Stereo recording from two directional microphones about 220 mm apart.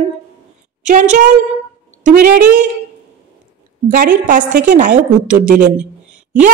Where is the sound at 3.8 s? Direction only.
40° right (ahead or behind).